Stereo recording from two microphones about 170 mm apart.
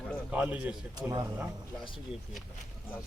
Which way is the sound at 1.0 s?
20° right (ahead or behind).